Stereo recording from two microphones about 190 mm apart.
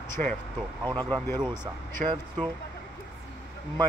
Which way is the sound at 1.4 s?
5° right (ahead or behind).